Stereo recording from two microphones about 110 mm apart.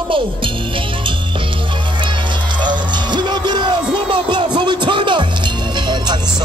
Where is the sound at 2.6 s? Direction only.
45° right (ahead or behind).